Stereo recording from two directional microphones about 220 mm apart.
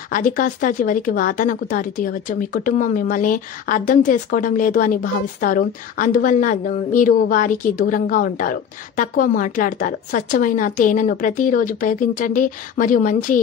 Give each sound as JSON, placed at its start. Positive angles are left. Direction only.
{"t": 0.1, "sound": "speech", "side_deg": 35}